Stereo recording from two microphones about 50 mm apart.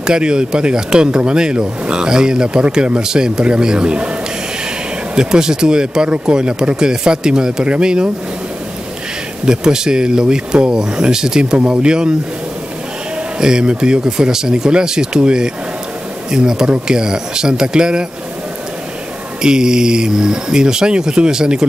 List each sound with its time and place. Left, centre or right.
0.0 s speech: centre
5.1 s speech: centre
9.5 s speech: centre
13.4 s speech: centre
19.4 s speech: centre